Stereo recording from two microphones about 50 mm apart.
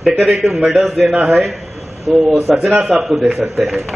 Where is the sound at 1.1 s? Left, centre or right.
Right.